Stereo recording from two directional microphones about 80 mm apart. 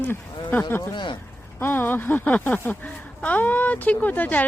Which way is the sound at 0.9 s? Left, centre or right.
Left.